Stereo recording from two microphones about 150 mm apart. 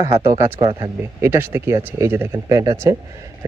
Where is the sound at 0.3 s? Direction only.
20° right (ahead or behind).